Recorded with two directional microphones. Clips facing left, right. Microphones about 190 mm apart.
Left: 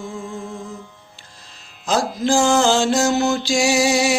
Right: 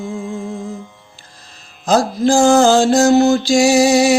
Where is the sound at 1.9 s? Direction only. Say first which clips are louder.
Right 5 dB; 40° right (ahead or behind).